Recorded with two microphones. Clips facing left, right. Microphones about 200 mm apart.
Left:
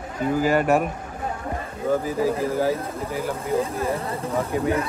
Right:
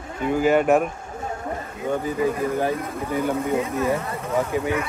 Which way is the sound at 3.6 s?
30° left (ahead or behind).